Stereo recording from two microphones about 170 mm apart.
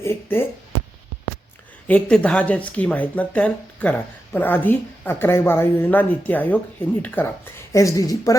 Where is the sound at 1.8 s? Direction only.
10° left (ahead or behind).